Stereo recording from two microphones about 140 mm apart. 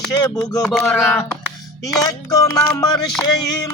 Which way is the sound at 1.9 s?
25° left (ahead or behind).